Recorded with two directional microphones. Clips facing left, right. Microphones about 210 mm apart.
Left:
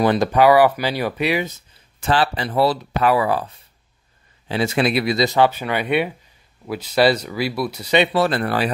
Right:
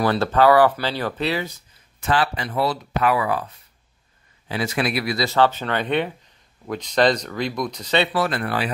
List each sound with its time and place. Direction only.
0.0 s speech: 15° left (ahead or behind); by 3.4 s 30° left (ahead or behind)
4.5 s speech: 25° left (ahead or behind)
8.1 s speech: 30° left (ahead or behind)